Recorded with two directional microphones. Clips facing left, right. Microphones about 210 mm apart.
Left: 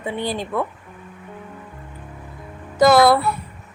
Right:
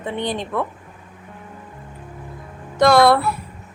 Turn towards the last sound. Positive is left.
turn(degrees=5)  # may be behind; listen again after turning